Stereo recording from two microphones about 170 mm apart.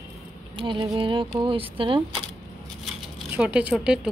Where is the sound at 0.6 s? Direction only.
30° right (ahead or behind).